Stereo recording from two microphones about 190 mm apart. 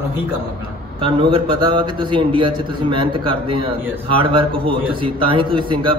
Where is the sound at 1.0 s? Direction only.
25° right (ahead or behind).